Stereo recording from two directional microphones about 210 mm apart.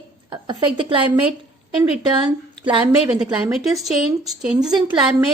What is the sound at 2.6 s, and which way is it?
Speech, 25° right (ahead or behind).